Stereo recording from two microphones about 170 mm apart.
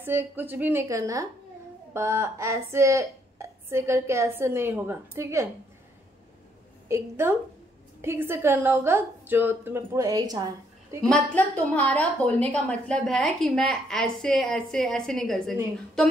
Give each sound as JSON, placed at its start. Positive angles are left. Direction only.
{"t": 0.0, "sound": "a woman's voice", "side_deg": -10}
{"t": 6.9, "sound": "a woman's voice", "side_deg": -15}
{"t": 11.1, "sound": "a woman's voice", "side_deg": 10}